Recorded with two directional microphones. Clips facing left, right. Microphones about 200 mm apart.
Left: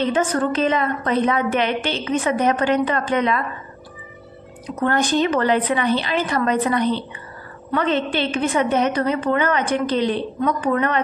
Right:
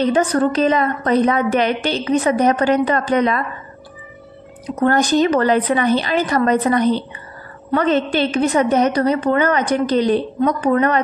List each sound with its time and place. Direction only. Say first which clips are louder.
0.0 s a woman's voice: right 4 dB; 35° right (ahead or behind)
4.7 s a woman's voice: right 4 dB; 40° right (ahead or behind)